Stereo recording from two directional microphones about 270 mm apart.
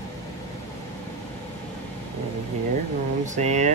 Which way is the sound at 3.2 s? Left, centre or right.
Right.